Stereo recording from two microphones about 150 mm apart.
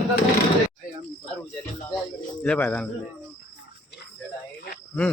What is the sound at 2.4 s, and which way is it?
Speech, 10° left (ahead or behind).